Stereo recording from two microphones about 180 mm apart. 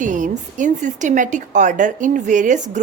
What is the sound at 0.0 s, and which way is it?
A woman's voice, 45° right (ahead or behind).